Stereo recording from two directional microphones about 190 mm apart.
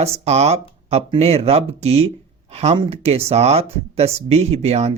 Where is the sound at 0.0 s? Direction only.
35° right (ahead or behind).